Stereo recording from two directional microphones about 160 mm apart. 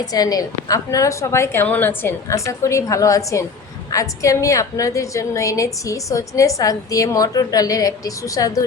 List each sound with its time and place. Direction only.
0.0 s a woman's voice: 25° left (ahead or behind)